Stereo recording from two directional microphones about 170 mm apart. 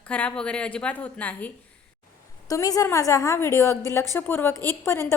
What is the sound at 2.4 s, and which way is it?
A woman's voice, 20° left (ahead or behind).